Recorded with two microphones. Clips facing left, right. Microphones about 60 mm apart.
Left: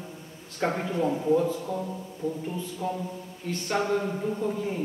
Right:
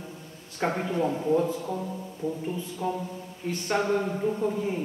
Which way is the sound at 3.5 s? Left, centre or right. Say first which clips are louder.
Right 1 dB; centre.